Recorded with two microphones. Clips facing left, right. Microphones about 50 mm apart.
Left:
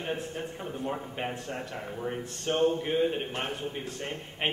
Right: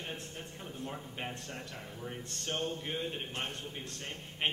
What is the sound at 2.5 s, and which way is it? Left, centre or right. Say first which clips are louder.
A man's voice: left 11 dB; left.